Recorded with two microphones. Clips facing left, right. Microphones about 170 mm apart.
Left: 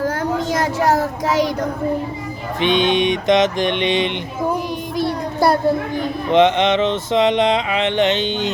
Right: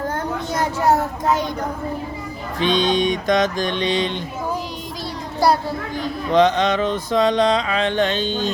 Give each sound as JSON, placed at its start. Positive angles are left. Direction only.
{"t": 0.0, "sound": "child singing", "side_deg": 90}
{"t": 2.6, "sound": "mantra", "side_deg": 20}
{"t": 4.9, "sound": "child singing", "side_deg": 55}
{"t": 6.3, "sound": "mantra", "side_deg": 20}